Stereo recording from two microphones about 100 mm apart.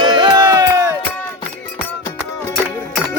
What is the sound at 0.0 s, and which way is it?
Music, 50° right (ahead or behind).